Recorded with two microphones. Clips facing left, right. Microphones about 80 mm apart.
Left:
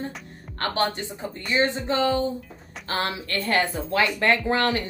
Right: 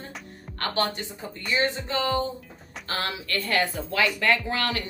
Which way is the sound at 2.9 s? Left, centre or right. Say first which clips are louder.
Left 3 dB; left.